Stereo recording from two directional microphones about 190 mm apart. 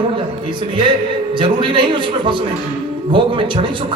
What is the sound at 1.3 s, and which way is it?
A man's voice, 25° right (ahead or behind).